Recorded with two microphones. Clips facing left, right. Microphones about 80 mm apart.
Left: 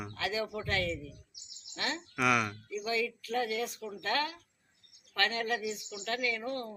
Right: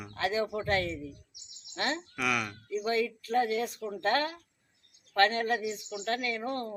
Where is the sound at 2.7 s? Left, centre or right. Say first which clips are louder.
Right 8 dB; right.